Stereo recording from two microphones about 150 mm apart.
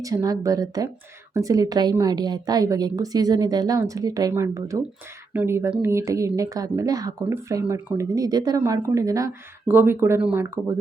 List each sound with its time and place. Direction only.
0.0 s a woman's voice: 25° right (ahead or behind)